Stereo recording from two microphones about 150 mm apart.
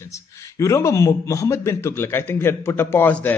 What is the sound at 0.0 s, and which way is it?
A man's voice, 20° left (ahead or behind).